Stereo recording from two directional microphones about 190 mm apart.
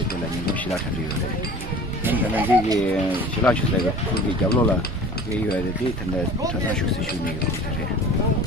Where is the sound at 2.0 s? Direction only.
10° right (ahead or behind).